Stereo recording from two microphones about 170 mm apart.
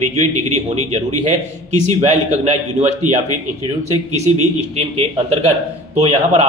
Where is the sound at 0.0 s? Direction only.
45° right (ahead or behind).